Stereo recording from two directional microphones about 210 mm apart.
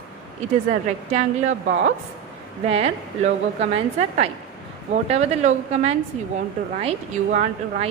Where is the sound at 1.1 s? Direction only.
35° right (ahead or behind).